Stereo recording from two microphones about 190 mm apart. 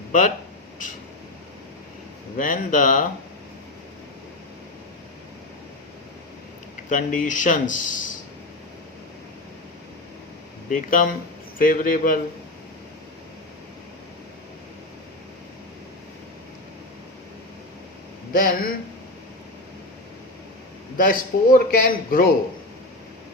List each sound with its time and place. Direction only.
0.1 s speech: 45° left (ahead or behind)
2.4 s a man's voice: 45° left (ahead or behind)
6.9 s a man's voice: 45° left (ahead or behind)
10.7 s a man's voice: 45° left (ahead or behind)
18.3 s a man's voice: 50° left (ahead or behind)
21.0 s a man's voice: 45° left (ahead or behind)